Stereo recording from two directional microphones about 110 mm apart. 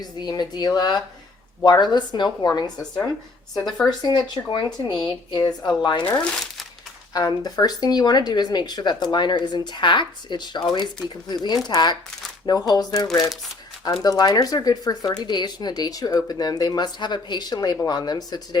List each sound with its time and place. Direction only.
0.0 s speech: 40° left (ahead or behind)
7.1 s speech: 35° left (ahead or behind)